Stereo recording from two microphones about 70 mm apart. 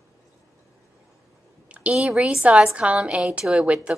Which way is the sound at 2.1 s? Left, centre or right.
Centre.